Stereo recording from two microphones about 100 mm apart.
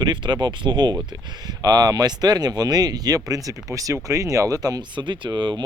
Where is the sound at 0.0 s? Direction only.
45° right (ahead or behind).